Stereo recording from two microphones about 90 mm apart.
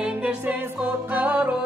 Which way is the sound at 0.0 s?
15° right (ahead or behind).